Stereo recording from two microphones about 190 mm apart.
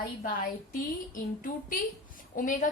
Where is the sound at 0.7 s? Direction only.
45° left (ahead or behind).